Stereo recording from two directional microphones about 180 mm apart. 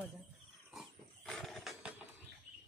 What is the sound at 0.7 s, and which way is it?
Wild animals, centre (ahead or behind).